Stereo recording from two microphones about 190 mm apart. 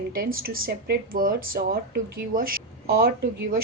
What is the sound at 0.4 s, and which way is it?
Speech, 50° right (ahead or behind).